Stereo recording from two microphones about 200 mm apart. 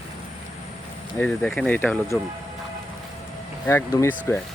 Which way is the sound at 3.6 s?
15° left (ahead or behind).